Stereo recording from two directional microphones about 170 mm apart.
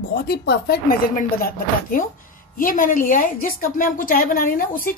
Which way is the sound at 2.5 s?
55° left (ahead or behind).